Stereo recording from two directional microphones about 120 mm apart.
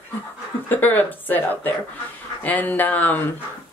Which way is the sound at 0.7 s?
15° left (ahead or behind).